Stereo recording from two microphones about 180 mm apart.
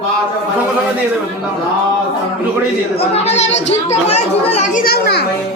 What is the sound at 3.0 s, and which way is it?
Speech, 35° left (ahead or behind).